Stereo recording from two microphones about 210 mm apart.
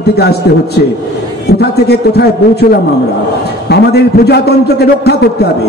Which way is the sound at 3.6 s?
50° left (ahead or behind).